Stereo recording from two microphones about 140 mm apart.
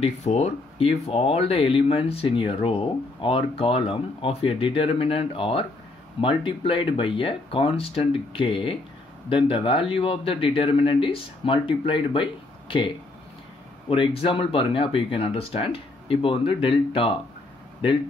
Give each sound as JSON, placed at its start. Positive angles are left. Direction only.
{"t": 0.0, "sound": "speech", "side_deg": 50}